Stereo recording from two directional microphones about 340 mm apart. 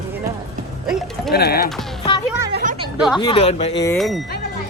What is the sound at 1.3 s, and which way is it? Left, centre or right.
Speech, left.